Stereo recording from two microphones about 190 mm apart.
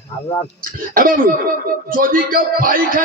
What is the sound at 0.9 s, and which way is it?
A man's voice, 50° right (ahead or behind).